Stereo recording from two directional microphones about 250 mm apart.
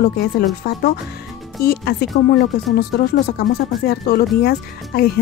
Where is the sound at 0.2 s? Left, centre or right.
Left.